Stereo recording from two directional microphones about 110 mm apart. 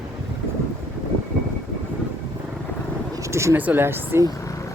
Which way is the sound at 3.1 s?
25° right (ahead or behind).